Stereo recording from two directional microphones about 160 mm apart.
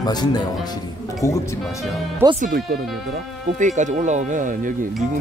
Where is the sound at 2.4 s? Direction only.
65° right (ahead or behind).